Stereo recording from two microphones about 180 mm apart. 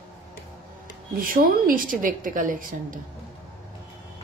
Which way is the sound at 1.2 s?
50° right (ahead or behind).